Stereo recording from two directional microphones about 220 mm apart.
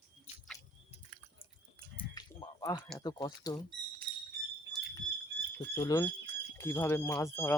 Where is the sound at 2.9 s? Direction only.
15° left (ahead or behind).